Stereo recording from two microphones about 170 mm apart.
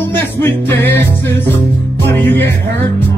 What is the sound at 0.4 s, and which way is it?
Music, 10° left (ahead or behind).